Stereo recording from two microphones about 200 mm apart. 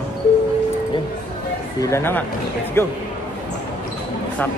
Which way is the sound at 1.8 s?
15° left (ahead or behind).